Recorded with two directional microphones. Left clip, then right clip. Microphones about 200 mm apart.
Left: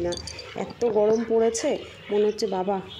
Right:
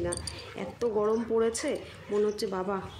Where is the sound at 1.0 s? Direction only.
10° left (ahead or behind).